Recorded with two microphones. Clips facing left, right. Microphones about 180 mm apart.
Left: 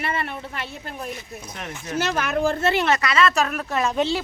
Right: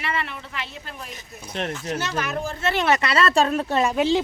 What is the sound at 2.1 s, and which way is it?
Speech, 50° left (ahead or behind).